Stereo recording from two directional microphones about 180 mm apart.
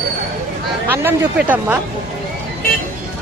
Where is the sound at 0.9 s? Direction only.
10° right (ahead or behind).